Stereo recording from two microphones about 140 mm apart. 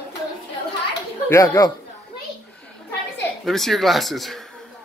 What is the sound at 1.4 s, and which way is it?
Speech, 30° left (ahead or behind).